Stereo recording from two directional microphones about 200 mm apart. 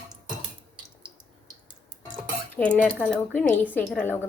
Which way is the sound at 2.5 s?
5° left (ahead or behind).